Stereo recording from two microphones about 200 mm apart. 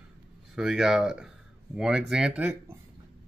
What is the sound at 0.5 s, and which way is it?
Speech, centre (ahead or behind).